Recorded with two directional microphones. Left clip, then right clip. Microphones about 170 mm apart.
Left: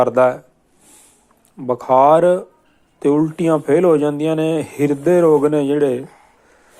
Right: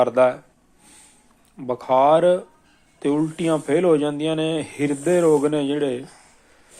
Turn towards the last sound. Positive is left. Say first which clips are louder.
# left 6 dB
turn(degrees=30)  # may be behind; listen again after turning